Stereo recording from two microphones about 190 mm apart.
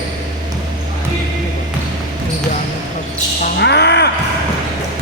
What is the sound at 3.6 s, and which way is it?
Music, 65° left (ahead or behind).